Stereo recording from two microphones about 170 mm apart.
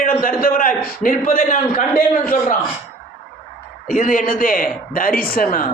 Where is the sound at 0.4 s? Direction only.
55° left (ahead or behind).